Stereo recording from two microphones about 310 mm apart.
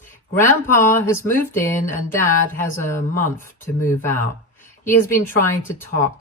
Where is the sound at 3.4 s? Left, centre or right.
Centre.